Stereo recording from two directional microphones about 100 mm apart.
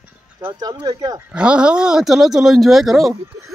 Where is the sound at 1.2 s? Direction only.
10° right (ahead or behind).